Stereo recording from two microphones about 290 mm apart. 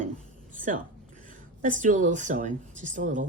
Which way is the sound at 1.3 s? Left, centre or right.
Right.